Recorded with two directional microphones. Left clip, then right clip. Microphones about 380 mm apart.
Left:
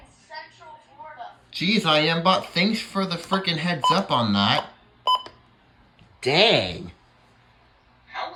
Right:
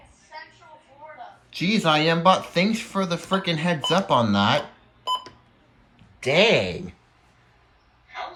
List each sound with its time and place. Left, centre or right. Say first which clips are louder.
1.5 s speech: even; centre
5.0 s telephone dialing: left 5 dB; centre
6.2 s speech: even; centre